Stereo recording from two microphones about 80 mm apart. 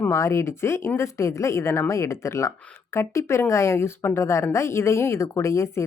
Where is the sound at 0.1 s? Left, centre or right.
Left.